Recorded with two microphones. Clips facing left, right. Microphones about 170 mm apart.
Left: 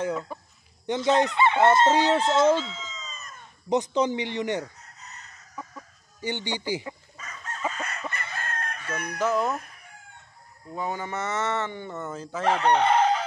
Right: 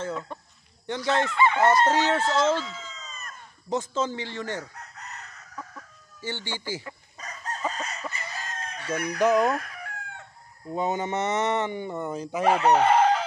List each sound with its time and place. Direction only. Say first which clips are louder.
0.0 s speech: left 3 dB; 10° left (ahead or behind)
0.8 s fowl: left 4 dB; 20° left (ahead or behind)
2.8 s a sound: left 1 dB; 60° right (ahead or behind)
3.6 s fowl: left 4 dB; 20° left (ahead or behind)
4.7 s chicken: right 6 dB; 70° right (ahead or behind)
6.2 s speech: left 4 dB; 20° left (ahead or behind)
7.2 s crowing: right 3 dB; 35° right (ahead or behind)
8.1 s chicken: left 2 dB; 60° left (ahead or behind)
9.2 s speech: right 4 dB; 15° right (ahead or behind)
9.5 s chicken: right 3 dB; 90° right
10.7 s speech: right 4 dB; 20° right (ahead or behind)
12.5 s chicken: right 1 dB; 5° right (ahead or behind)